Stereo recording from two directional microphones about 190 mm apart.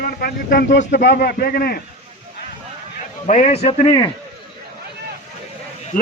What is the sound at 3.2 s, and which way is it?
Speech, 40° left (ahead or behind).